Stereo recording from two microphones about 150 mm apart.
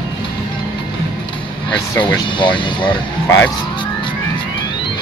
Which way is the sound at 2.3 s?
35° left (ahead or behind).